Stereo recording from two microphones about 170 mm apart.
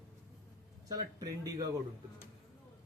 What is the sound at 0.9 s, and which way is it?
Speech, 20° right (ahead or behind).